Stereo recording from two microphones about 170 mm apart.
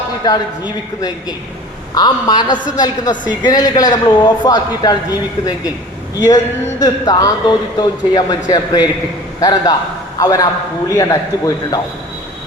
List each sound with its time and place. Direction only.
0.3 s a woman's voice: 25° left (ahead or behind)
6.1 s a woman's voice: 25° left (ahead or behind)